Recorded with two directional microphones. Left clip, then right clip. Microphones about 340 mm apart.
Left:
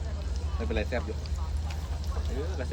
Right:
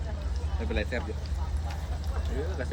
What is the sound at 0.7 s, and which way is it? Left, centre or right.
Speech, centre.